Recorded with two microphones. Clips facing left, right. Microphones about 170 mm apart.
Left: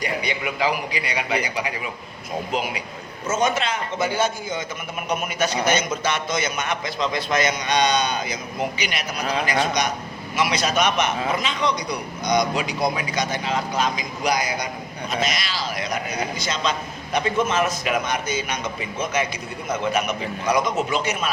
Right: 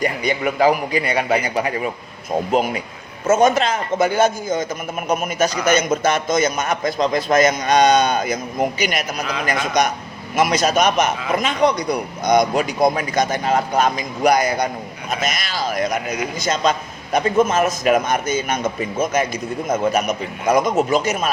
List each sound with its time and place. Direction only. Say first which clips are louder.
0.0 s speech: right 6 dB; 45° right (ahead or behind)